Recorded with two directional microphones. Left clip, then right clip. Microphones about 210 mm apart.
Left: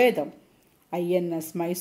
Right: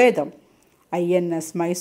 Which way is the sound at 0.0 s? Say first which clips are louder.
Right 5 dB; 25° right (ahead or behind).